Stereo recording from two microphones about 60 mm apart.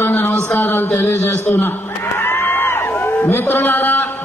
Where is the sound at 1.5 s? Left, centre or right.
Left.